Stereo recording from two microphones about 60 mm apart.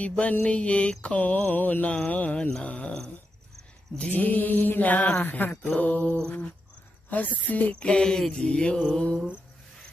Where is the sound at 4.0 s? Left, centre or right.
Left.